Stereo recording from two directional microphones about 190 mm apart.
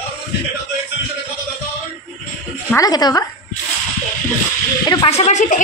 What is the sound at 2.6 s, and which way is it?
Speech, 15° left (ahead or behind).